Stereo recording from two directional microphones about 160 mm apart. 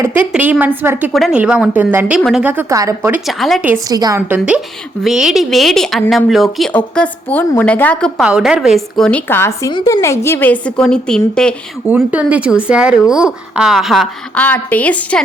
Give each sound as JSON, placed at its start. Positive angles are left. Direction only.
{"t": 0.0, "sound": "a woman's voice", "side_deg": -10}
{"t": 3.2, "sound": "speech", "side_deg": 0}
{"t": 3.8, "sound": "a woman's voice", "side_deg": -25}
{"t": 4.3, "sound": "a woman's voice", "side_deg": -5}
{"t": 8.2, "sound": "a woman's voice", "side_deg": -5}
{"t": 11.9, "sound": "speech", "side_deg": -10}
{"t": 14.3, "sound": "a woman's voice", "side_deg": 10}